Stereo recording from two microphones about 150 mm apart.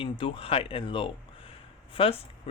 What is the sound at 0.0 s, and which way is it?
A man's voice, 35° left (ahead or behind).